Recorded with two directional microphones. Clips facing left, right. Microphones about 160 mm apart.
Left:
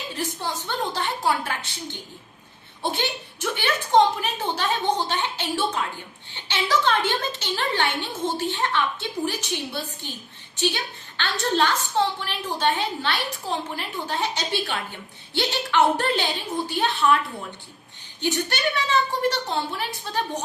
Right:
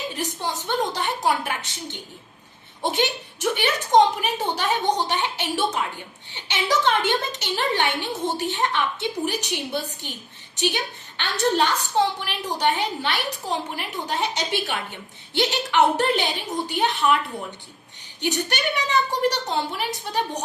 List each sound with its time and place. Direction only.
0.1 s a woman's voice: 20° right (ahead or behind)